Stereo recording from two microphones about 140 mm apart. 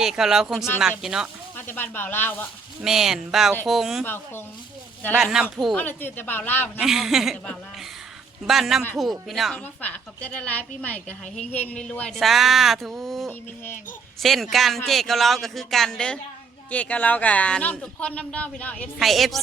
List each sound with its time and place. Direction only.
0.0 s speech: 5° right (ahead or behind)
1.5 s speech: 15° left (ahead or behind)
2.8 s speech: 5° right (ahead or behind)
4.0 s speech: 15° left (ahead or behind)
5.1 s speech: 5° right (ahead or behind)
5.7 s speech: 15° left (ahead or behind)
6.7 s speech: centre (ahead or behind)
8.4 s speech: centre (ahead or behind)
9.8 s speech: 10° left (ahead or behind)
18.9 s speech: centre (ahead or behind)